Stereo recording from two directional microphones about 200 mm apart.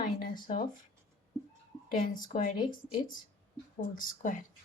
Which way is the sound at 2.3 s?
35° left (ahead or behind).